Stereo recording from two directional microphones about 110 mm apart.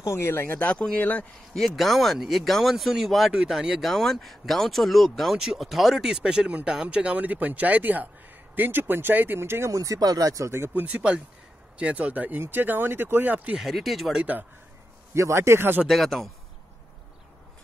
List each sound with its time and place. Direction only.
0.0 s speech: 25° left (ahead or behind)
1.6 s speech: centre (ahead or behind); by 10.7 s 25° right (ahead or behind)
10.7 s speech: 10° right (ahead or behind)
13.7 s speech: centre (ahead or behind)
15.1 s speech: 25° right (ahead or behind)
15.9 s speech: centre (ahead or behind)